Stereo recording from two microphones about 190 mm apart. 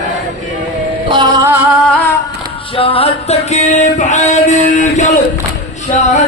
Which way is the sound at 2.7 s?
30° left (ahead or behind).